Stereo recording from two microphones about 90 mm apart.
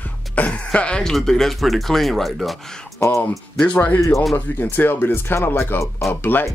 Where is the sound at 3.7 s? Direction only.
20° left (ahead or behind).